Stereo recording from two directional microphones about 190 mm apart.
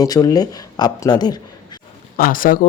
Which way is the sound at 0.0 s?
20° left (ahead or behind).